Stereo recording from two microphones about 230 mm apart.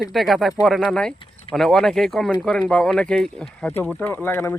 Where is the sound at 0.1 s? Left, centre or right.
Centre.